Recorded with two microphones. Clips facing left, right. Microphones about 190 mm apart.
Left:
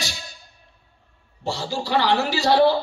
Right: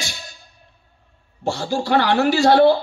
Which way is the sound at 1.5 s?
50° right (ahead or behind).